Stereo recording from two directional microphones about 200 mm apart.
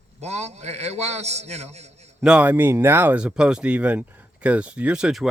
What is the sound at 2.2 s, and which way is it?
Speech, 5° right (ahead or behind).